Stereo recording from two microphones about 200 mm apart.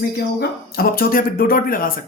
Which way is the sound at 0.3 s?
50° left (ahead or behind).